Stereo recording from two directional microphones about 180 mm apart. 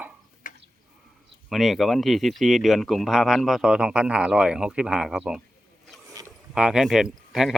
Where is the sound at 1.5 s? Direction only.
Centre (ahead or behind).